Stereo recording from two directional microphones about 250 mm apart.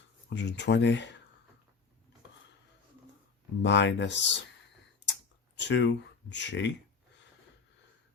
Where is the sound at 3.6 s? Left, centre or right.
Left.